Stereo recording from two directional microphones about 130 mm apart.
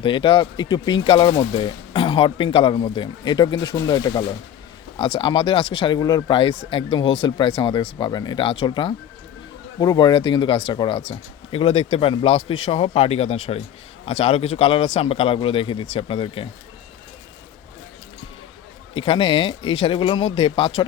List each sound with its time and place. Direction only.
0.0 s speech: 40° left (ahead or behind)
4.9 s speech: 45° left (ahead or behind)
6.0 s speech: 30° left (ahead or behind)
18.9 s speech: 45° left (ahead or behind)